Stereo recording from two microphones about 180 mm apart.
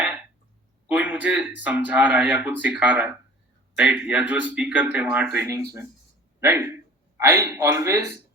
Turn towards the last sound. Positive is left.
turn(degrees=-15)  # may be behind; listen again after turning